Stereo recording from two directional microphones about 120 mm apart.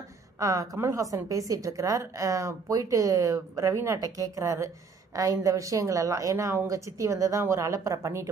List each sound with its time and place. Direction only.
0.4 s a woman's voice: 25° right (ahead or behind)